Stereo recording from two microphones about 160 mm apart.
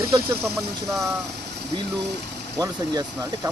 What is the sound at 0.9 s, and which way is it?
Speech, centre (ahead or behind).